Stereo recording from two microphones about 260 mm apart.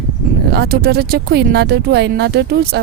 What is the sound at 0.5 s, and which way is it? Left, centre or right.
A woman's voice, right.